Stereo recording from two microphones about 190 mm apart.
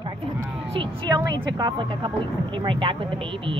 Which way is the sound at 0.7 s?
25° right (ahead or behind).